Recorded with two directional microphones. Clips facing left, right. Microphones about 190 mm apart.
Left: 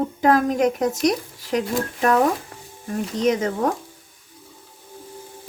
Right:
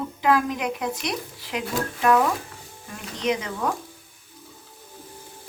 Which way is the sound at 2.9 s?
45° left (ahead or behind).